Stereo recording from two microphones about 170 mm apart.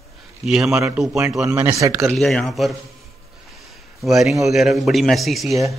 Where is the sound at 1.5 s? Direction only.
15° right (ahead or behind).